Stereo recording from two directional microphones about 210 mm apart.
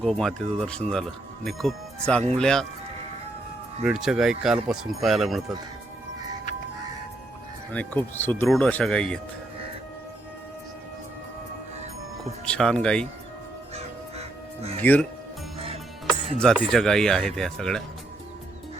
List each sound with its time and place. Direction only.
0.0 s speech: centre (ahead or behind)
3.8 s speech: 5° right (ahead or behind)
7.7 s speech: 5° left (ahead or behind)
12.5 s speech: 5° left (ahead or behind)
13.7 s crow: 30° right (ahead or behind)
14.8 s speech: 10° left (ahead or behind)
16.4 s speech: centre (ahead or behind)